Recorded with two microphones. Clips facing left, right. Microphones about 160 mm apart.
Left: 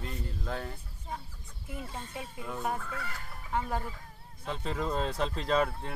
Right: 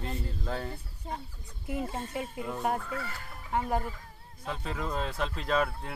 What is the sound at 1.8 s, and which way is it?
Speech, 50° right (ahead or behind).